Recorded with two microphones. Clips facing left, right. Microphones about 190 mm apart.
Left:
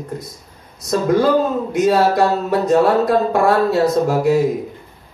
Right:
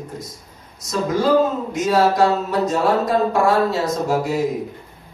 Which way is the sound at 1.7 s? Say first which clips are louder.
Left 4 dB; 60° left (ahead or behind).